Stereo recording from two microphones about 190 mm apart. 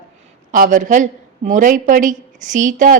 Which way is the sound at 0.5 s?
45° right (ahead or behind).